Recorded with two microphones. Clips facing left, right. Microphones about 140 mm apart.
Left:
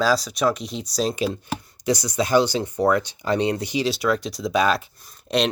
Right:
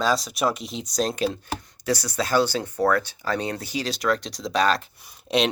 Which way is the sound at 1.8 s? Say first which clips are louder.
Left 3 dB; 15° left (ahead or behind).